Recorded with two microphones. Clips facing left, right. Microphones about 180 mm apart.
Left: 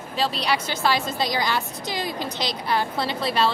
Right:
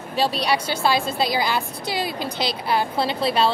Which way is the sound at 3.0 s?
30° right (ahead or behind).